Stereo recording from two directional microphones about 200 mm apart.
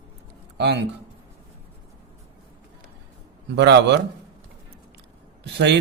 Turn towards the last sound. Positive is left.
turn(degrees=-60)  # may be behind; listen again after turning